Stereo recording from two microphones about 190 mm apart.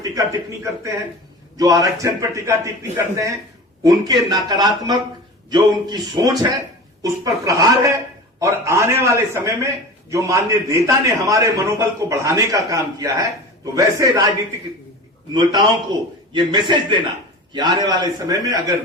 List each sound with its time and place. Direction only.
0.0 s a man's voice: 20° right (ahead or behind)
15.3 s a man's voice: 20° right (ahead or behind)